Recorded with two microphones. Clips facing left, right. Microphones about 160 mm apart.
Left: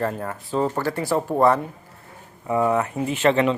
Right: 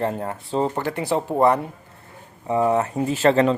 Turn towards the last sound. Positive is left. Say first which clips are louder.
# right 2 dB
turn(degrees=-40)  # may be behind; listen again after turning